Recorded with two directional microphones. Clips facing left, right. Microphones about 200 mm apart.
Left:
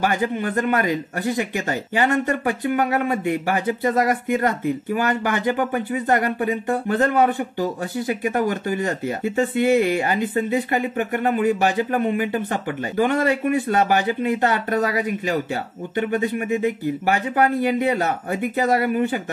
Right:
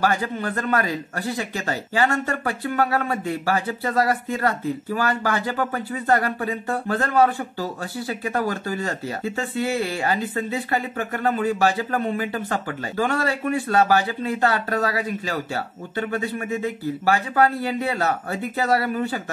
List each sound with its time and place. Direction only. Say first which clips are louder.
0.2 s speech: left 4 dB; 20° left (ahead or behind)